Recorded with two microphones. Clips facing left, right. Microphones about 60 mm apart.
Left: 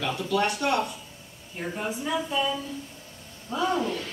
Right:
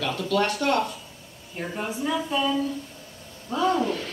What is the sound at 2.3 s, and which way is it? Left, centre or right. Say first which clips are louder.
Speech: right 3 dB; centre.